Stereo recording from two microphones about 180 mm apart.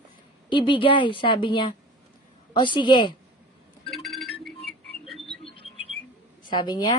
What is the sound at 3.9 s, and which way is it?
Music, centre (ahead or behind).